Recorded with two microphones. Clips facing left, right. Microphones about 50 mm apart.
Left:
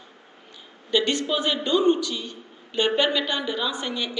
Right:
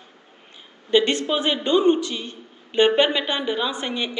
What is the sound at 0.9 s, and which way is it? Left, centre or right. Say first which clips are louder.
A man's voice: right 4 dB; right.